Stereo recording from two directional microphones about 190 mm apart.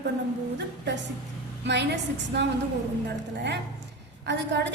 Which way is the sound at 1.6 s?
65° right (ahead or behind).